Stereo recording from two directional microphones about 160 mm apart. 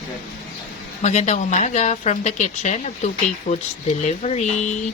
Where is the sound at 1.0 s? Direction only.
45° left (ahead or behind).